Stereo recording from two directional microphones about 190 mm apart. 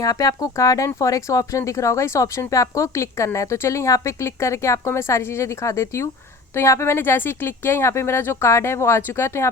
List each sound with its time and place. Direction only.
0.0 s speech: 20° left (ahead or behind)